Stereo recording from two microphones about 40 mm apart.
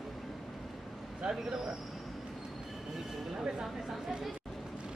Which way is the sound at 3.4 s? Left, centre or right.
Centre.